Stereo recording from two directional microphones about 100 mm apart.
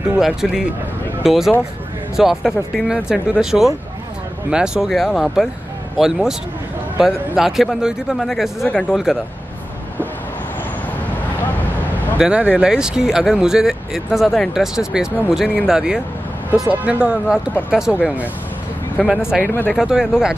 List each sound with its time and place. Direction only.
0.2 s speech: 5° right (ahead or behind)
7.3 s speech: 5° right (ahead or behind)
12.2 s speech: 10° right (ahead or behind)
19.0 s speech: centre (ahead or behind)
19.4 s speech: 20° left (ahead or behind)
19.7 s speech: 5° right (ahead or behind)